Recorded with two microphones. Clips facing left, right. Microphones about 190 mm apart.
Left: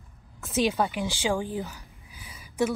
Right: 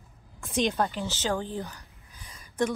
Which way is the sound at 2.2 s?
5° left (ahead or behind).